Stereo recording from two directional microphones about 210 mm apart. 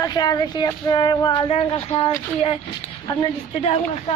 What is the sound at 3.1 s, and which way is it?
Speech, 25° left (ahead or behind).